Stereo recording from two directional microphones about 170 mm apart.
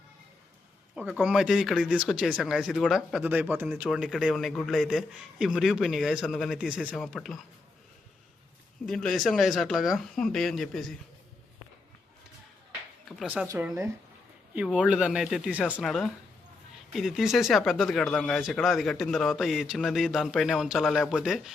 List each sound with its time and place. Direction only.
0.9 s speech: 5° right (ahead or behind)
3.8 s speech: centre (ahead or behind)
8.9 s speech: centre (ahead or behind)
13.1 s speech: centre (ahead or behind)
14.5 s speech: 5° right (ahead or behind)